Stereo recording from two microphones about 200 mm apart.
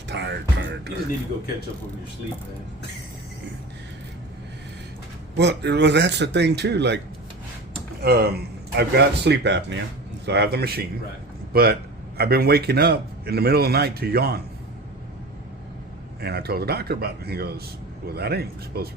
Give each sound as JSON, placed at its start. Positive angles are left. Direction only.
{"t": 0.1, "sound": "music", "side_deg": -60}
{"t": 5.4, "sound": "speech", "side_deg": -60}
{"t": 8.0, "sound": "a man's voice", "side_deg": -50}
{"t": 16.2, "sound": "a man's voice", "side_deg": -55}